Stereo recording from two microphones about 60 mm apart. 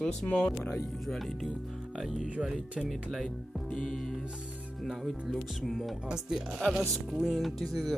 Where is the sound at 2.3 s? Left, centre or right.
Centre.